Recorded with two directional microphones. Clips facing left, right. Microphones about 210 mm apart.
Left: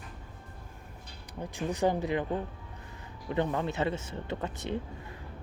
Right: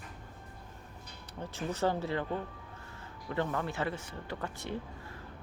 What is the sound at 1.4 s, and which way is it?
Speech, 15° left (ahead or behind).